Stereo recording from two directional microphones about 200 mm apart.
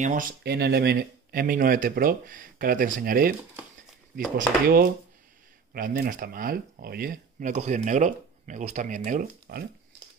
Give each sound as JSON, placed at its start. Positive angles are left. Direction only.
{"t": 0.0, "sound": "speech", "side_deg": -40}
{"t": 0.4, "sound": "speech", "side_deg": -55}
{"t": 4.4, "sound": "speech", "side_deg": -45}